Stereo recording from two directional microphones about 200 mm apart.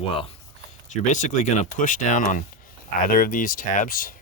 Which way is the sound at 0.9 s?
40° left (ahead or behind).